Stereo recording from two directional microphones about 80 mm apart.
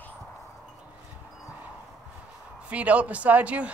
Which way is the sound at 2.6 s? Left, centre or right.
Centre.